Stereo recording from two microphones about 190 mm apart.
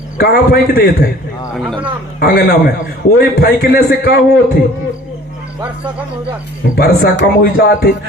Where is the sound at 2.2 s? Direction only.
55° left (ahead or behind).